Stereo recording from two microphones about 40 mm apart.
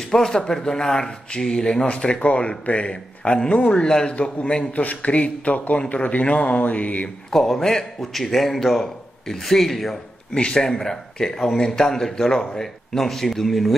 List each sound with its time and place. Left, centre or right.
0.0 s speech: centre
4.1 s speech: left
7.2 s a man's voice: centre
10.3 s a man's voice: left; by 13.7 s centre